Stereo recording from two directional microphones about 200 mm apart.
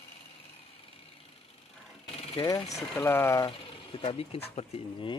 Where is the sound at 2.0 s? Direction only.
30° left (ahead or behind).